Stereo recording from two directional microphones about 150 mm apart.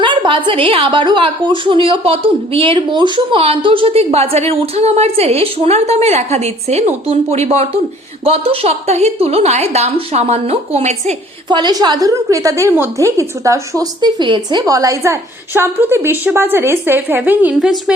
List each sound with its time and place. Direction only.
0.0 s a woman's voice: 35° right (ahead or behind)
11.4 s a woman's voice: 30° right (ahead or behind); by 17.7 s 10° right (ahead or behind)